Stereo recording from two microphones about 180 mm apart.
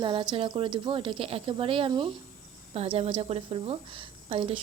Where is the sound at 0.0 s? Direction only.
25° right (ahead or behind).